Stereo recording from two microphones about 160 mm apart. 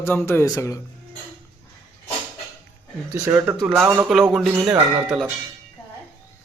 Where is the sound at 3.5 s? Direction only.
Centre (ahead or behind).